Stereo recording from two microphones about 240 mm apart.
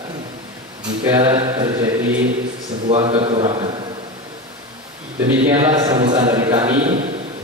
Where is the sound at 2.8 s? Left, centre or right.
Right.